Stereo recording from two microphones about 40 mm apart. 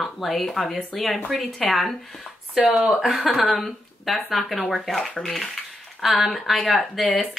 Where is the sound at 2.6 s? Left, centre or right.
Right.